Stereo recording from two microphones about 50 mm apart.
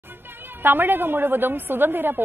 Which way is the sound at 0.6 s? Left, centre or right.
Right.